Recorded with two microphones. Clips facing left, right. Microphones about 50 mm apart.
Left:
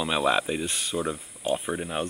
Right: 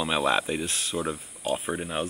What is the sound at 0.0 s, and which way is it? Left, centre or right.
Speech, centre.